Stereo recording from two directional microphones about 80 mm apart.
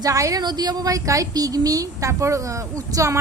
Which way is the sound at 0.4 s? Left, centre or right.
Right.